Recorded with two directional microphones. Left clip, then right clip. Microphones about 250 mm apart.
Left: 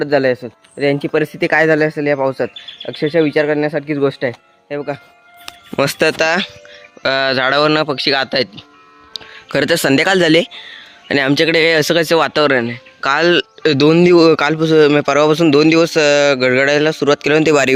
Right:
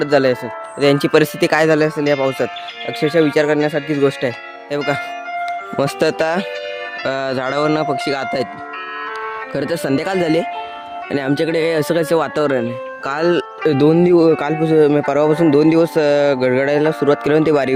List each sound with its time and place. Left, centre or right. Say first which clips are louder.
0.0 s speech: even; centre
0.8 s speech: right 2 dB; right
1.4 s speech: left 1 dB; centre
4.7 s speech: right 3 dB; right
5.7 s speech: left 4 dB; centre
9.5 s speech: left 7 dB; centre